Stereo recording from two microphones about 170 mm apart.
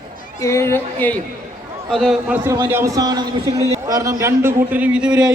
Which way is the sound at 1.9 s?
Centre (ahead or behind).